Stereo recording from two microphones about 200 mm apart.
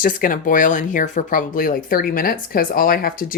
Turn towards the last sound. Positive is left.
turn(degrees=45)  # may be behind; listen again after turning